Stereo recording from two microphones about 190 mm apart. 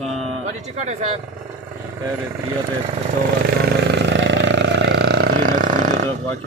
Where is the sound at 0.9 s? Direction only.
35° right (ahead or behind).